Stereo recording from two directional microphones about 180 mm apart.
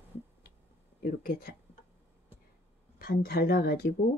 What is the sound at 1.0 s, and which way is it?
Speech, 55° left (ahead or behind).